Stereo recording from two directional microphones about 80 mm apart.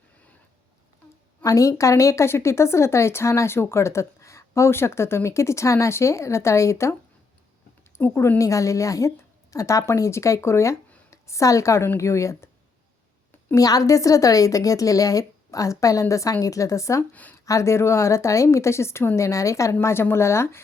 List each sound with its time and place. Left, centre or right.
1.5 s speech: left
7.9 s speech: left
8.4 s a woman's voice: left
13.6 s a woman's voice: left
19.8 s speech: left